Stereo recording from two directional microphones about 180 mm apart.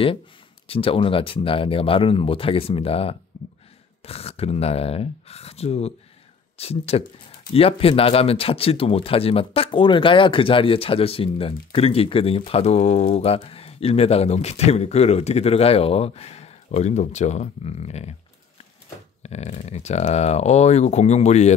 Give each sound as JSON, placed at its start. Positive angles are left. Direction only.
{"t": 0.7, "sound": "speech", "side_deg": 30}
{"t": 19.2, "sound": "speech", "side_deg": 35}